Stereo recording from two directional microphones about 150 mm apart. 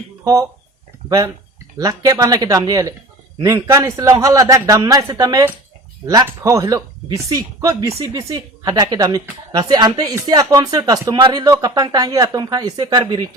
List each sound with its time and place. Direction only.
1.8 s speech: 25° right (ahead or behind)